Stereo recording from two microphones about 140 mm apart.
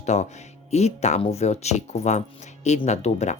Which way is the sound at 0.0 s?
55° left (ahead or behind).